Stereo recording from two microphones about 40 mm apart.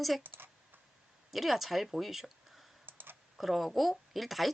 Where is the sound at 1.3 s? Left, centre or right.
Centre.